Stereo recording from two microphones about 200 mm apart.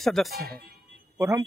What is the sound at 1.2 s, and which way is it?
Speech, 15° right (ahead or behind).